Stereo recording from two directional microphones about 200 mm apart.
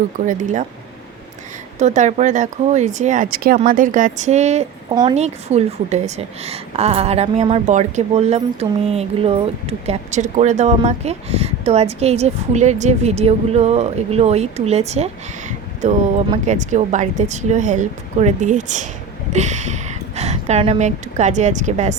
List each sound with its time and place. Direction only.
0.3 s a woman's voice: 40° right (ahead or behind)
1.8 s a woman's voice: 35° right (ahead or behind)